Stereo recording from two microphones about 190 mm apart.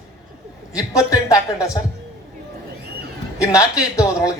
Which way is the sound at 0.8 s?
15° left (ahead or behind).